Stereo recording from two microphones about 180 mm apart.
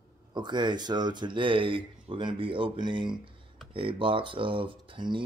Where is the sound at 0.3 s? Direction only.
25° right (ahead or behind).